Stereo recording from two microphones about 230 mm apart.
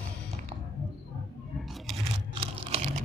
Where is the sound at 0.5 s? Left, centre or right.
Right.